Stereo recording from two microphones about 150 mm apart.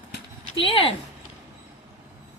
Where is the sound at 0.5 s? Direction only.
35° left (ahead or behind).